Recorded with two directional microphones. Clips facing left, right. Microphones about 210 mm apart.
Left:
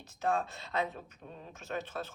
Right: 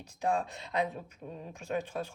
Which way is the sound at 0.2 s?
15° right (ahead or behind).